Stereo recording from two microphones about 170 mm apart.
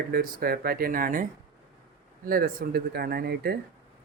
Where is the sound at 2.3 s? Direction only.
55° right (ahead or behind).